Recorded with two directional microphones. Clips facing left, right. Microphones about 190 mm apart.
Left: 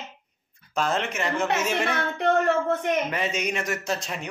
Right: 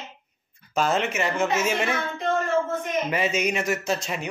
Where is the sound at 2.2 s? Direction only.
65° left (ahead or behind).